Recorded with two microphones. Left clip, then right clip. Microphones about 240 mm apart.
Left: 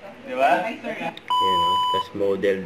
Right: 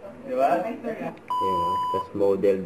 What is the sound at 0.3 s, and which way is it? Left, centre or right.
Speech, centre.